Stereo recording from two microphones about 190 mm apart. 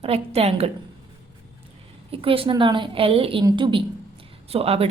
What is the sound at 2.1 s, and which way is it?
A woman's voice, 30° right (ahead or behind).